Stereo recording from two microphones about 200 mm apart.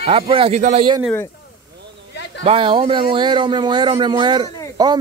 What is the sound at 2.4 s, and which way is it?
Speech, 30° right (ahead or behind).